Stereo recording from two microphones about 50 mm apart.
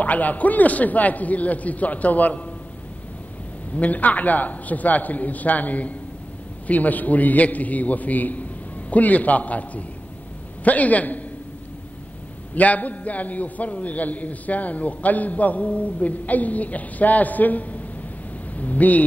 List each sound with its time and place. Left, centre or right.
0.0 s a man's voice: left
3.7 s a man's voice: left
12.5 s a man's voice: left